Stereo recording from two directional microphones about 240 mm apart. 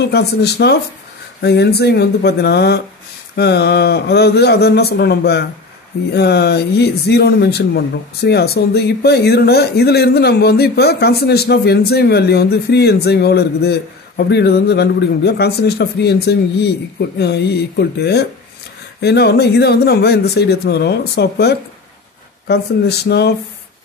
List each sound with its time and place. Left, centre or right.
0.0 s speech: left